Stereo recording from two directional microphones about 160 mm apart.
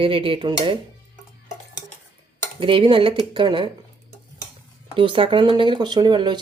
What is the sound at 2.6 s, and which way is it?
Speech, 30° right (ahead or behind).